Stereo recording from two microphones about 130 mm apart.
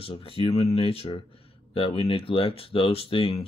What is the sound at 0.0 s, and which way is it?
Speech, 45° left (ahead or behind).